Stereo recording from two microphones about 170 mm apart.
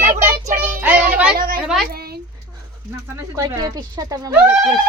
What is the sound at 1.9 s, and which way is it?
Speech, 65° right (ahead or behind).